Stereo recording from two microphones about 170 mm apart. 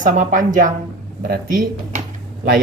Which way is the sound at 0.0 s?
50° right (ahead or behind).